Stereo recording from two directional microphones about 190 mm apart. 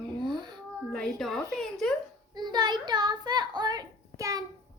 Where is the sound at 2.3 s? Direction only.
20° right (ahead or behind).